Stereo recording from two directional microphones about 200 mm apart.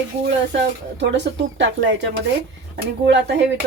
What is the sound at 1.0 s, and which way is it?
Speech, 60° right (ahead or behind).